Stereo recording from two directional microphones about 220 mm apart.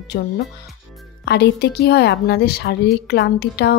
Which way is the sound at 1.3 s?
50° left (ahead or behind).